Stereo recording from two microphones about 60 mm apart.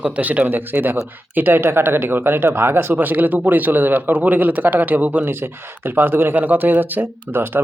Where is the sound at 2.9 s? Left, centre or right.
Right.